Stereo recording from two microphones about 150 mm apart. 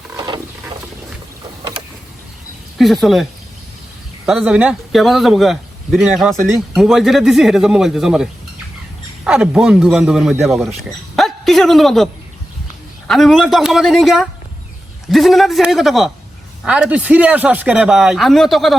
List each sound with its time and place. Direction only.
2.7 s a man's voice: centre (ahead or behind)
4.3 s a man's voice: 10° right (ahead or behind)
11.2 s a sound: centre (ahead or behind)
13.1 s a man's voice: centre (ahead or behind)